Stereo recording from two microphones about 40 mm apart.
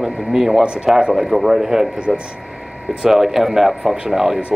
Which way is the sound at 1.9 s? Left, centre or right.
Right.